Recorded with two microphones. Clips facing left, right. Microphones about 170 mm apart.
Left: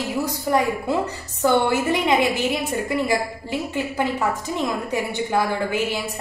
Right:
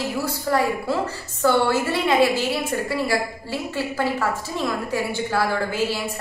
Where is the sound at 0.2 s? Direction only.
20° left (ahead or behind).